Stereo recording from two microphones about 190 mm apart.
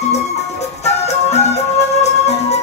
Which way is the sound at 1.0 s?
35° left (ahead or behind).